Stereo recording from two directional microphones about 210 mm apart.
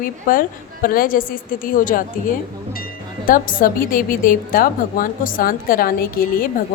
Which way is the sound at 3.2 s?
40° left (ahead or behind).